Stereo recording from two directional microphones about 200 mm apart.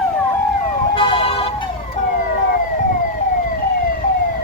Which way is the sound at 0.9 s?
25° left (ahead or behind).